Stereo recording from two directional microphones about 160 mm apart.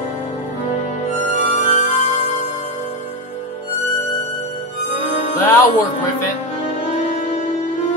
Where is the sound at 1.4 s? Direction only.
45° left (ahead or behind).